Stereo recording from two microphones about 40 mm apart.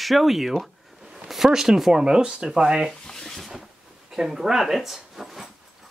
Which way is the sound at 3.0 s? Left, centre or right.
Centre.